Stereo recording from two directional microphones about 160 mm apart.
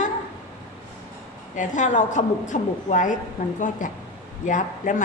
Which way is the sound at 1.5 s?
50° left (ahead or behind).